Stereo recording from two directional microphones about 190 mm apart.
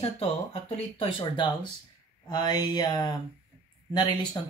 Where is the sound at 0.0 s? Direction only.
30° left (ahead or behind).